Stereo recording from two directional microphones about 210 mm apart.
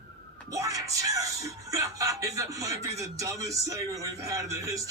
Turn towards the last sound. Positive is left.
turn(degrees=-15)  # may be behind; listen again after turning